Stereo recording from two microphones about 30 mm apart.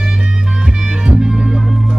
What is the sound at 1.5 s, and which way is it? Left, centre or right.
Music, centre.